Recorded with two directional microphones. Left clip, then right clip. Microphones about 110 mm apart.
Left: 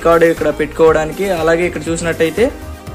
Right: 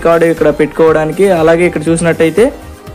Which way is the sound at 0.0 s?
25° right (ahead or behind).